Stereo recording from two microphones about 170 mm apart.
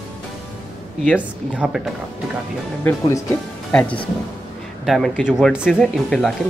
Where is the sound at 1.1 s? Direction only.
5° right (ahead or behind).